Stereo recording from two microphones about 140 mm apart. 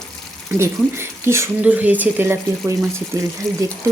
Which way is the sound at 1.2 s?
20° right (ahead or behind).